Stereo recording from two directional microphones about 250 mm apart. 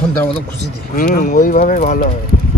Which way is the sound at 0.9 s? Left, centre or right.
Left.